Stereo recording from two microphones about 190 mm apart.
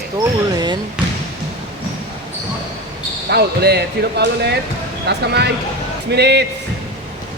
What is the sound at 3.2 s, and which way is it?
Speech, 60° right (ahead or behind).